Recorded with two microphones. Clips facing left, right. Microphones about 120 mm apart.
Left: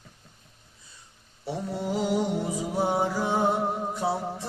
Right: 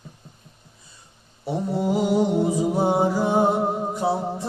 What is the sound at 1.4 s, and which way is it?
Mantra, 20° right (ahead or behind).